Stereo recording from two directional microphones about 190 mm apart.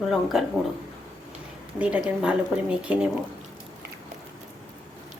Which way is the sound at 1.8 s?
5° right (ahead or behind).